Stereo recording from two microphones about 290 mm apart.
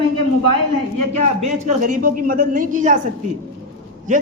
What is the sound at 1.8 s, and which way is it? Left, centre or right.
A man's voice, right.